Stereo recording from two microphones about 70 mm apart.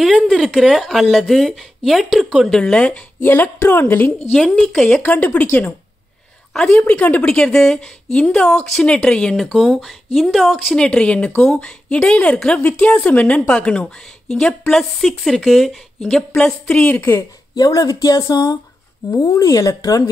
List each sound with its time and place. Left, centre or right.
0.0 s a woman's voice: centre
2.5 s speech: centre
3.2 s a woman's voice: left
4.4 s a woman's voice: centre
4.8 s a woman's voice: centre
6.5 s speech: centre
10.9 s speech: centre
14.7 s a woman's voice: centre
16.8 s a woman's voice: left
17.6 s speech: left